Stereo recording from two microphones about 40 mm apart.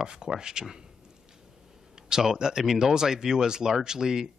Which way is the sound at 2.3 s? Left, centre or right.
Centre.